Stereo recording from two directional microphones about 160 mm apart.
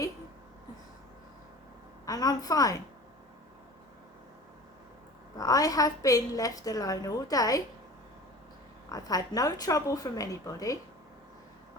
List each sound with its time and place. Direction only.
2.0 s a woman's voice: 25° left (ahead or behind)
5.4 s a woman's voice: 20° left (ahead or behind)
8.9 s a woman's voice: 25° left (ahead or behind)